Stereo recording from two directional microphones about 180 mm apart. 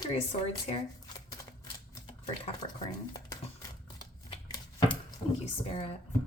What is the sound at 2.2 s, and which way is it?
Speech, 25° left (ahead or behind).